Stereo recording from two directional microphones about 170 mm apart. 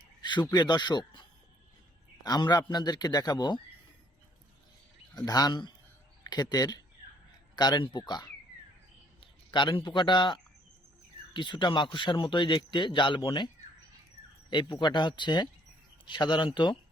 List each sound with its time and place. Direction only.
0.2 s a man's voice: 25° left (ahead or behind)
5.1 s a man's voice: 25° left (ahead or behind)
14.5 s speech: 25° left (ahead or behind)